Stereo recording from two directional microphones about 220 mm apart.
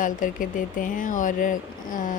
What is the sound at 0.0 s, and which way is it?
A woman's voice, 35° left (ahead or behind).